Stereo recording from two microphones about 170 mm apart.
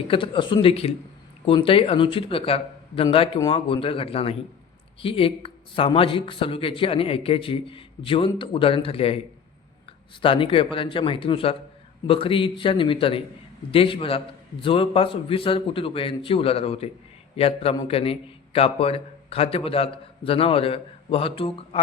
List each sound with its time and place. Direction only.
0.1 s a man's voice: 30° left (ahead or behind)